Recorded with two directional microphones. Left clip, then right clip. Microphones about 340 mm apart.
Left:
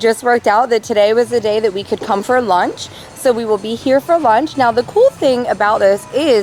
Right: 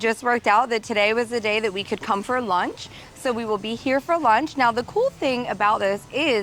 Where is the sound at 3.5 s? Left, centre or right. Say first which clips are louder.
Left 9 dB; right.